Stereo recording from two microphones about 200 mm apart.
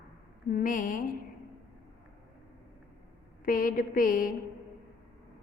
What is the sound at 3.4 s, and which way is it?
Speech, 45° left (ahead or behind).